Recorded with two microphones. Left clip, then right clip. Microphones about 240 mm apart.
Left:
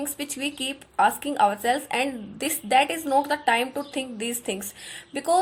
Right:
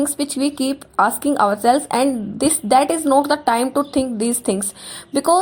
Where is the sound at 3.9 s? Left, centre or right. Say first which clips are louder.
Right 10 dB; right.